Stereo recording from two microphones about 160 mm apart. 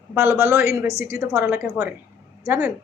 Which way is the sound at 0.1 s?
15° right (ahead or behind).